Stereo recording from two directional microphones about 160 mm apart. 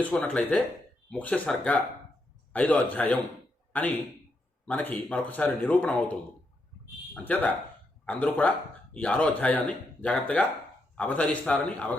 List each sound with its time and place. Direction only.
0.0 s a man's voice: 5° left (ahead or behind)